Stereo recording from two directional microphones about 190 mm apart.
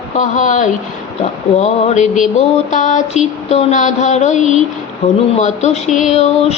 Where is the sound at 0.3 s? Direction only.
40° left (ahead or behind).